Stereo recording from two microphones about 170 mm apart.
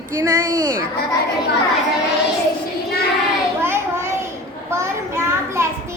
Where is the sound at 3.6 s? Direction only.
15° right (ahead or behind).